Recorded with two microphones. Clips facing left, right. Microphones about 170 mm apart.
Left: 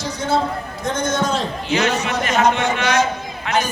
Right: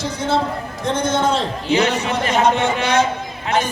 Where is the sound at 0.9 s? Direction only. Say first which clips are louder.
Right 2 dB; 30° right (ahead or behind).